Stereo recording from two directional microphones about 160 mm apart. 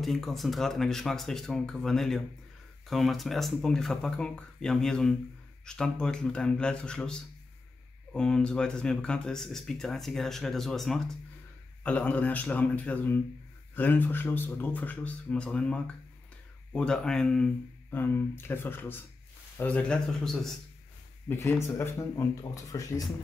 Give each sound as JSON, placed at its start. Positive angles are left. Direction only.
{"t": 0.0, "sound": "speech", "side_deg": 0}
{"t": 21.3, "sound": "speech", "side_deg": 15}